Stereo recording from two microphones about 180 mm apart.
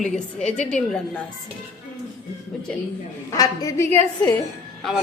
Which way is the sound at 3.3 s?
20° left (ahead or behind).